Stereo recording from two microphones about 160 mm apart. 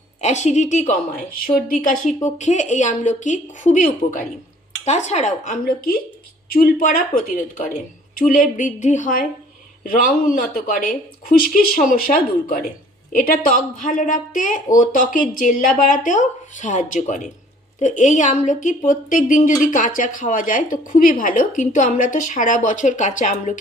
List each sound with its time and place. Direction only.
0.2 s a woman's voice: 45° left (ahead or behind)
4.9 s a woman's voice: 45° left (ahead or behind)
5.6 s a woman's voice: 65° left (ahead or behind); by 23.6 s 50° left (ahead or behind)